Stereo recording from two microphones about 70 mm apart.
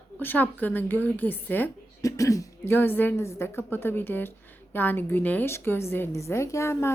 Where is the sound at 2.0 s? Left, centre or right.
Left.